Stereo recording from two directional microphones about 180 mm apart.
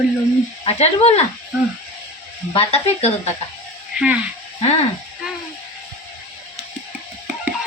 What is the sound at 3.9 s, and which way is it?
Speech, 5° right (ahead or behind).